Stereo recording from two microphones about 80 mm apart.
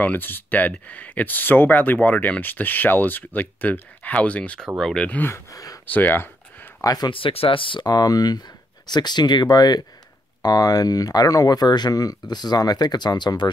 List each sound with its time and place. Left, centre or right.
0.0 s speech: left
4.6 s speech: centre
5.0 s speech: centre
5.3 s speech: left
5.9 s a sound: left
6.8 s speech: left
7.1 s speech: left
7.8 s speech: left